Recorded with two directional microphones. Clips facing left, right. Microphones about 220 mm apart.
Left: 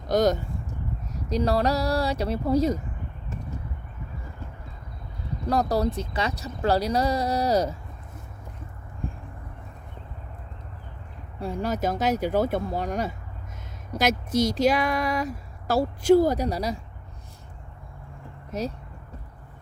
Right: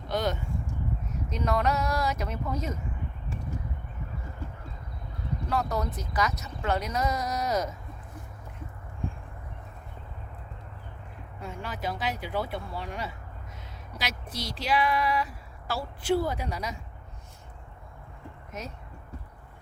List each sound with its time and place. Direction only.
0.1 s speech: 40° left (ahead or behind)
5.5 s speech: 35° left (ahead or behind)
11.3 s speech: 35° left (ahead or behind)
18.5 s speech: 35° left (ahead or behind)